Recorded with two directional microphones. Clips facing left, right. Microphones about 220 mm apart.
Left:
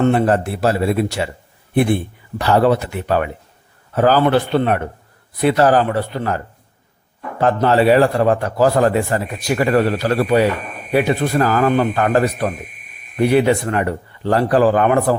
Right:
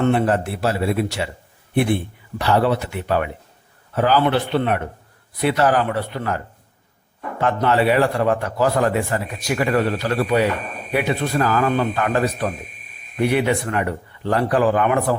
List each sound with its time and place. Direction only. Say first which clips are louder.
0.1 s a man's voice: left 3 dB; 45° left (ahead or behind)
2.4 s a man's voice: left 4 dB; 45° left (ahead or behind)